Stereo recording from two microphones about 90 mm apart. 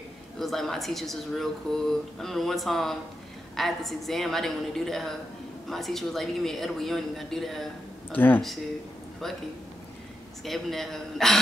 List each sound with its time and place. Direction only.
0.4 s speech: 5° left (ahead or behind)
8.1 s speech: 20° left (ahead or behind)
10.4 s speech: centre (ahead or behind)